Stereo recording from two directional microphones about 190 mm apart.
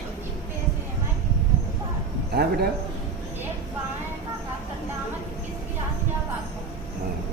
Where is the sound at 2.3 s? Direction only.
55° right (ahead or behind).